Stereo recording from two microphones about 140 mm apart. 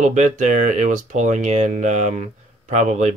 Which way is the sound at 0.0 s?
60° right (ahead or behind).